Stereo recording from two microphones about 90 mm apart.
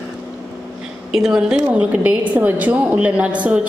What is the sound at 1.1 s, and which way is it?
A woman's voice, 5° right (ahead or behind).